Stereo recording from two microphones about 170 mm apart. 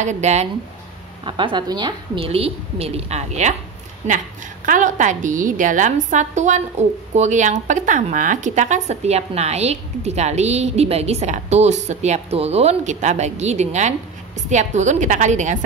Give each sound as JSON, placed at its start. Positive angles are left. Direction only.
{"t": 0.0, "sound": "a woman's voice", "side_deg": -45}
{"t": 1.2, "sound": "a woman's voice", "side_deg": -30}
{"t": 4.6, "sound": "a woman's voice", "side_deg": -50}